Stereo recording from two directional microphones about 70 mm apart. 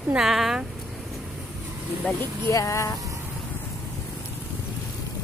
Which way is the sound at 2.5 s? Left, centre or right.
Left.